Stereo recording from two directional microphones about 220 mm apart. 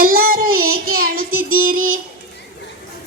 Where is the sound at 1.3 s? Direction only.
70° right (ahead or behind).